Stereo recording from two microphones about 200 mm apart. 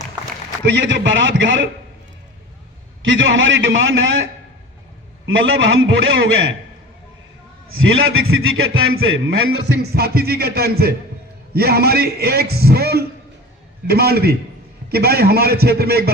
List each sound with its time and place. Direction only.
0.6 s a man's voice: 60° right (ahead or behind)
3.0 s a man's voice: 70° right (ahead or behind)
5.2 s a man's voice: 70° right (ahead or behind)
7.7 s a man's voice: 90° right
9.6 s a man's voice: 55° right (ahead or behind)